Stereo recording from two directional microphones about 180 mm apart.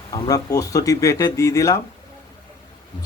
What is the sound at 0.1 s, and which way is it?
Speech, 20° left (ahead or behind).